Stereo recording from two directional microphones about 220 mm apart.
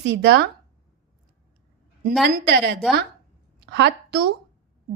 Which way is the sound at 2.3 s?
50° right (ahead or behind).